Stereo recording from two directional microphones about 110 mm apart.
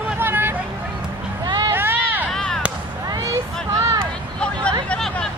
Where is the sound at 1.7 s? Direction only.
20° right (ahead or behind).